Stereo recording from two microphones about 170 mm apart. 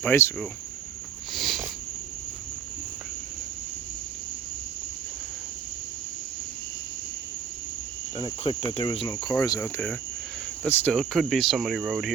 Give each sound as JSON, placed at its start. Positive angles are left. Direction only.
{"t": 0.0, "sound": "speech", "side_deg": 15}
{"t": 1.3, "sound": "a sound", "side_deg": 0}
{"t": 8.7, "sound": "cricket", "side_deg": 30}
{"t": 9.3, "sound": "speech", "side_deg": 15}